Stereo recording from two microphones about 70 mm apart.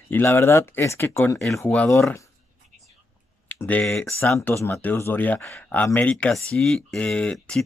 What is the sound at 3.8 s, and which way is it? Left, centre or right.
Speech, centre.